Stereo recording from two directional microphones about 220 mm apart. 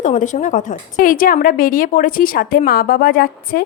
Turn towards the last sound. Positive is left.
turn(degrees=45)  # may be behind; listen again after turning